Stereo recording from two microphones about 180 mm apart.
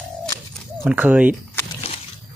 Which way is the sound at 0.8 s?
10° right (ahead or behind).